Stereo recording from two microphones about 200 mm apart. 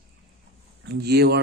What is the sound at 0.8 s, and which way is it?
Speech, 55° right (ahead or behind).